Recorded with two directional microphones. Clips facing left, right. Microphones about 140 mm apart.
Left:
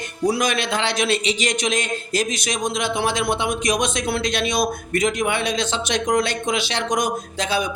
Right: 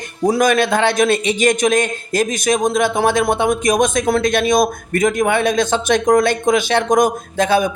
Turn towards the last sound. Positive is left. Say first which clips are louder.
# right 8 dB
turn(degrees=-50)  # may be behind; listen again after turning